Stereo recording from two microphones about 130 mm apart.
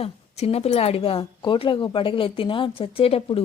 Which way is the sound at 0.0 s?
50° left (ahead or behind).